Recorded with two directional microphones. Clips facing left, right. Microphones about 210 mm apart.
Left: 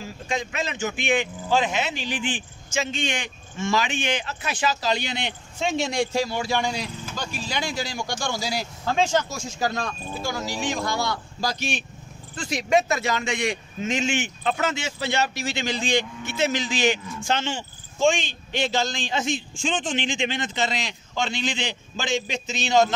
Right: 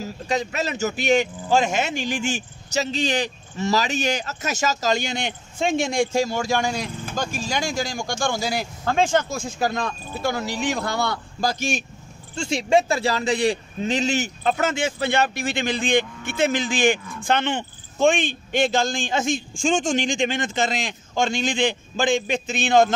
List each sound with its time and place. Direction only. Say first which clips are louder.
0.0 s a man's voice: right 4 dB; 40° right (ahead or behind)
12.4 s a man's voice: right 3 dB; 30° right (ahead or behind); by 22.9 s 55° right (ahead or behind)